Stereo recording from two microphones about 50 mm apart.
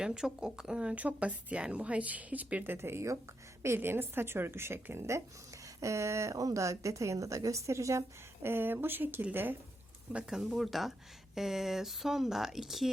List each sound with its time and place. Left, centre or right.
0.0 s speech: centre
0.9 s a woman's voice: right
2.7 s speech: right
3.8 s a woman's voice: right
5.8 s a woman's voice: right
8.4 s speech: right
10.2 s speech: centre